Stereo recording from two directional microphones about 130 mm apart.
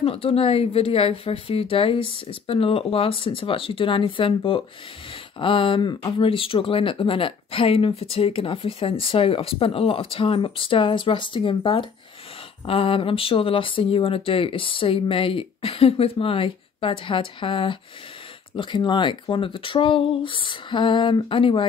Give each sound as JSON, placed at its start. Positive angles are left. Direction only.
{"t": 0.0, "sound": "speech", "side_deg": 45}